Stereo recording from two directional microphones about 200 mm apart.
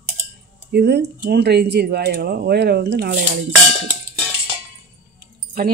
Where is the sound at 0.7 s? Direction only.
55° right (ahead or behind).